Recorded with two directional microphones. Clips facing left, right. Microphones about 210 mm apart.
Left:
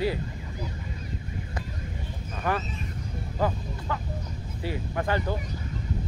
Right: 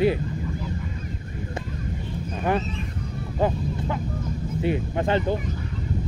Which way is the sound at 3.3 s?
20° right (ahead or behind).